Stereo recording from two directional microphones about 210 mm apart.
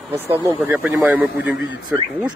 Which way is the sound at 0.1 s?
10° right (ahead or behind).